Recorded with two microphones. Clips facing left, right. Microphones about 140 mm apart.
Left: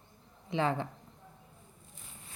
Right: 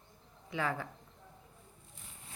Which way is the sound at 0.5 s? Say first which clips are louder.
Left 5 dB; 25° left (ahead or behind).